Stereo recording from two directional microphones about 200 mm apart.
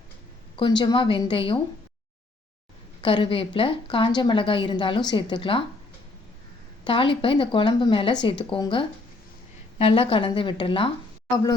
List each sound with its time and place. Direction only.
0.5 s a woman's voice: 25° left (ahead or behind)
3.0 s a woman's voice: 25° left (ahead or behind)
6.8 s a woman's voice: 25° left (ahead or behind)